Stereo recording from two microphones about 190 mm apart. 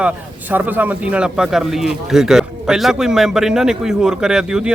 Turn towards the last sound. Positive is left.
turn(degrees=-5)  # may be behind; listen again after turning